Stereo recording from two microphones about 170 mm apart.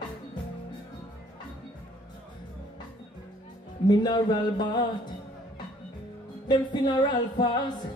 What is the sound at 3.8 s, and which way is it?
Music, 25° left (ahead or behind).